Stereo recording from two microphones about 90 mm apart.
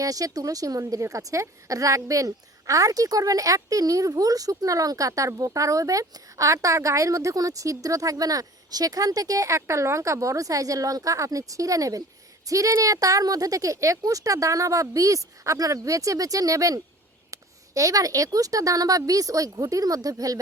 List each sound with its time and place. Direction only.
0.0 s a woman's voice: 40° right (ahead or behind)